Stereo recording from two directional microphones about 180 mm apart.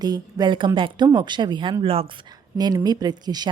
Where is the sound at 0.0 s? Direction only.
20° right (ahead or behind).